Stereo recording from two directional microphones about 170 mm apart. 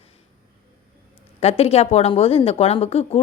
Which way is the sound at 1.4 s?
35° left (ahead or behind).